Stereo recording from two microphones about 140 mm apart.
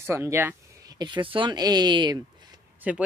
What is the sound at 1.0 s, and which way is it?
Speech, 35° right (ahead or behind).